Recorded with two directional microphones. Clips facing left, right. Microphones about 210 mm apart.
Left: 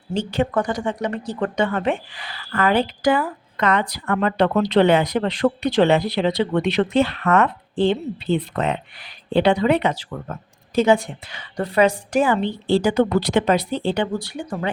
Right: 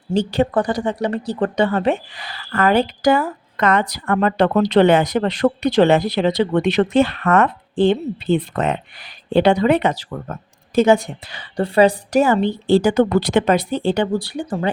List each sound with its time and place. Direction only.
0.1 s a woman's voice: 35° right (ahead or behind)